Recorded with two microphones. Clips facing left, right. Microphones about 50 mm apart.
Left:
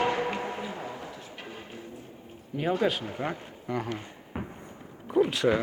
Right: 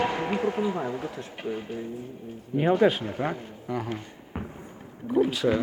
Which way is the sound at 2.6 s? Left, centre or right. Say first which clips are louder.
Right 5 dB; centre.